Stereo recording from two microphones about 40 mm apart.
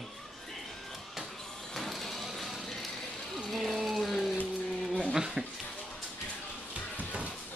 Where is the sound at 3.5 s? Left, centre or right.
Centre.